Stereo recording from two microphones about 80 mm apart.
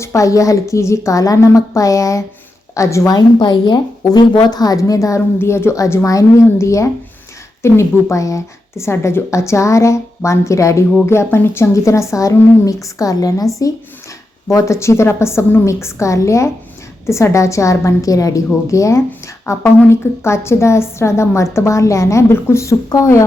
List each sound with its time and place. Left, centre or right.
0.0 s a woman's voice: left
3.1 s a woman's voice: left
5.7 s a woman's voice: left
14.5 s a woman's voice: left